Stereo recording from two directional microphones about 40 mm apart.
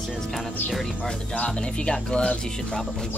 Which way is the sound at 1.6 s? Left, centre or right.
Left.